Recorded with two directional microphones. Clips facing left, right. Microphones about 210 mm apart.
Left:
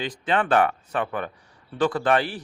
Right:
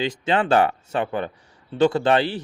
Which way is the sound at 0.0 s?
25° right (ahead or behind).